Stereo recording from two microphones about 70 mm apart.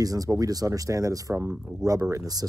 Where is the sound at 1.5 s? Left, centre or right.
Centre.